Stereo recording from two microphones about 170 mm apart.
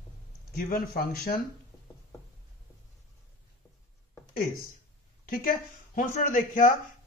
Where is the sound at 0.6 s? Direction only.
60° left (ahead or behind).